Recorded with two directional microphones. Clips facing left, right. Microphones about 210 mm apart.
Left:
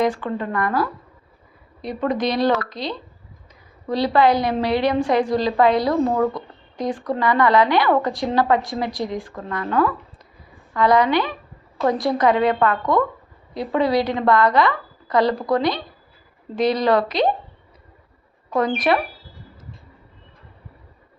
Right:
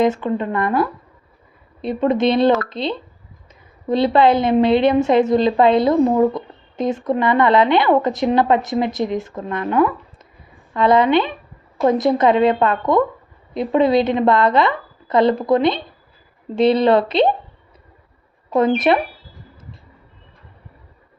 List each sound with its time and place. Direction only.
0.0 s a woman's voice: 20° right (ahead or behind)
18.5 s a woman's voice: 25° right (ahead or behind)